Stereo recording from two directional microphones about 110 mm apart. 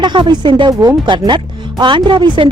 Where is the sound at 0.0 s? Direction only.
45° right (ahead or behind).